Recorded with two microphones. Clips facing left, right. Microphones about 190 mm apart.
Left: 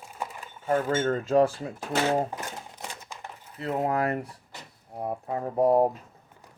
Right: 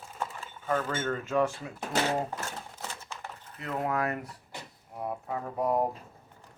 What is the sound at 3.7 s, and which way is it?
Speech, 30° left (ahead or behind).